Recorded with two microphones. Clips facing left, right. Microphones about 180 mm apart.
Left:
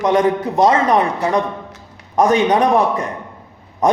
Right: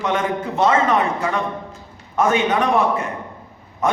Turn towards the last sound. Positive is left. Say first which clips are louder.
# left 5 dB
turn(degrees=35)  # may be behind; listen again after turning